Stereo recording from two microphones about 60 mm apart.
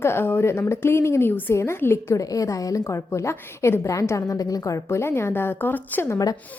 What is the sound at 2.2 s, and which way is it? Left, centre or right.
Speech, left.